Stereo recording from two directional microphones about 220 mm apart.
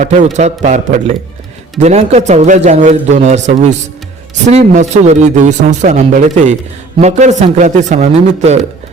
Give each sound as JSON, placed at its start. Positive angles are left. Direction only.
{"t": 0.0, "sound": "speech", "side_deg": -35}